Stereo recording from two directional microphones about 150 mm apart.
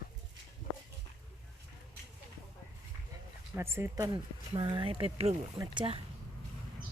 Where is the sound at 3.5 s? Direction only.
15° right (ahead or behind).